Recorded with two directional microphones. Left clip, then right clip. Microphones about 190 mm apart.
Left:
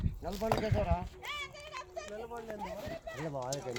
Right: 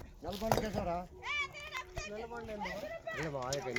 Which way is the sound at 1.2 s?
Centre (ahead or behind).